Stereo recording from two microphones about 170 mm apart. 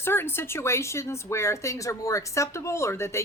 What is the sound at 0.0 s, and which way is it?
Speech, 15° left (ahead or behind).